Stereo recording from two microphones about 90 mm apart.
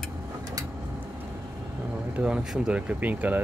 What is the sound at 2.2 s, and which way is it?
Speech, 10° right (ahead or behind).